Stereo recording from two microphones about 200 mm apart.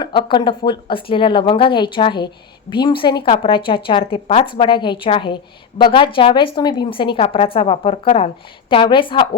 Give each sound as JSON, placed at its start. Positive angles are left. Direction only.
{"t": 0.0, "sound": "a woman's voice", "side_deg": 25}